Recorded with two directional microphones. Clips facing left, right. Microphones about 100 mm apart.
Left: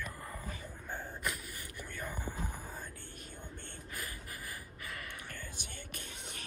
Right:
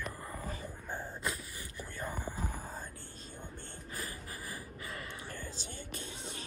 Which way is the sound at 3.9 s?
20° right (ahead or behind).